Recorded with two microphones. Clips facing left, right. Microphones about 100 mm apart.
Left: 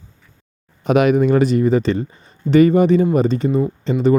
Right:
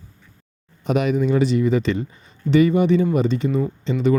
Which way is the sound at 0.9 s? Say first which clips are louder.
Left 6 dB; 65° left (ahead or behind).